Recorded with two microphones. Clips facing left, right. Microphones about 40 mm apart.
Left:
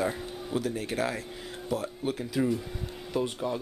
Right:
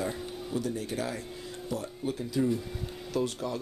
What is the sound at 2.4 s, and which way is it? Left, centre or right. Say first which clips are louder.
Speech: even; left.